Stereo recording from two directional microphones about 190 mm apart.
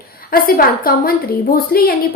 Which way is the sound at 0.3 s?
50° left (ahead or behind).